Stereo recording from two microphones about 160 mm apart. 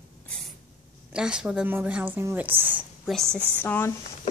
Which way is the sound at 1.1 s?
5° right (ahead or behind).